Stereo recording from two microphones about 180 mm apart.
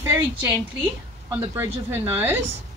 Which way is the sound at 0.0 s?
15° right (ahead or behind).